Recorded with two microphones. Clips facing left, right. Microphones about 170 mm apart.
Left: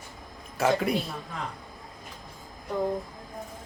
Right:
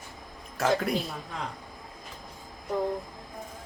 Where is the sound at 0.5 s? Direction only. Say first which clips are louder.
Left 1 dB; centre (ahead or behind).